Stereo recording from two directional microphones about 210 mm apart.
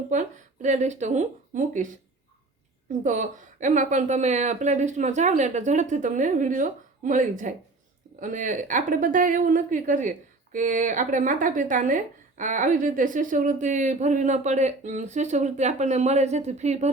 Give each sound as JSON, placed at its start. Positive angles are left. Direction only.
{"t": 0.1, "sound": "speech", "side_deg": -35}
{"t": 3.0, "sound": "a woman's voice", "side_deg": -35}